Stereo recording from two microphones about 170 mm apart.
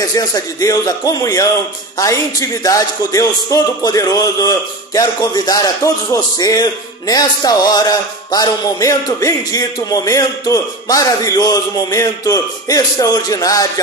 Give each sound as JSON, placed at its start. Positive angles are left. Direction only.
{"t": 0.1, "sound": "speech", "side_deg": 20}